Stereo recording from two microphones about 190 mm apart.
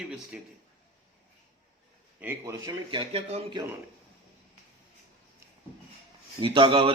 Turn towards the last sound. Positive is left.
turn(degrees=-25)  # may be behind; listen again after turning